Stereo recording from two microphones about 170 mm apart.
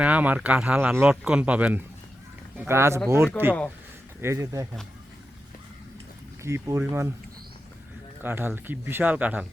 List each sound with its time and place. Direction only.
0.0 s speech: 10° right (ahead or behind)
6.4 s speech: 15° right (ahead or behind)
8.2 s speech: 10° right (ahead or behind)